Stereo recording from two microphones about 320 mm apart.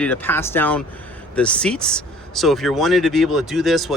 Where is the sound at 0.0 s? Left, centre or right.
Centre.